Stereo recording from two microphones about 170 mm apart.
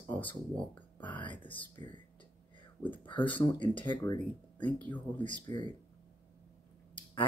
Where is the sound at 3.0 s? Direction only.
30° left (ahead or behind).